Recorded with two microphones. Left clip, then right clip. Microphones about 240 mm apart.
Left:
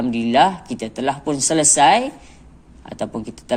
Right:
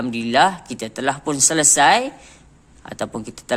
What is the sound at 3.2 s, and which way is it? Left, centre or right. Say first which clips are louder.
Speech: even; right.